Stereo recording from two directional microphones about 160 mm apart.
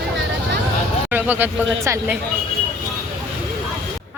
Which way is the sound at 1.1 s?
10° right (ahead or behind).